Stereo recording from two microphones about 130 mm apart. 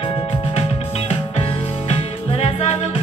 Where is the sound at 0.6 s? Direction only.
45° left (ahead or behind).